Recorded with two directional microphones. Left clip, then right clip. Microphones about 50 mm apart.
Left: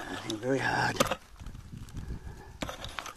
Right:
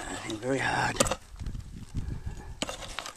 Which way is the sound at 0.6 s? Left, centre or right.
Centre.